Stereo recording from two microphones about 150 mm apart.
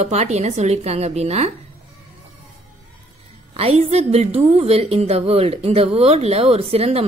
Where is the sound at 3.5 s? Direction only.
40° right (ahead or behind).